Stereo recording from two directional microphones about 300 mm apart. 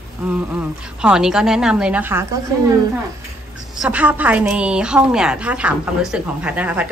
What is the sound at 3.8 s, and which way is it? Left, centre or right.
A woman's voice, centre.